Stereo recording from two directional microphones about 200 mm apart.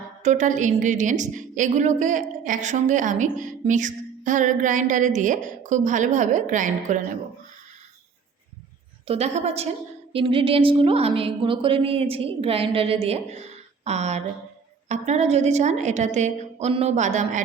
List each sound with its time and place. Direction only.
0.2 s a woman's voice: 35° right (ahead or behind)
9.0 s a woman's voice: 30° right (ahead or behind)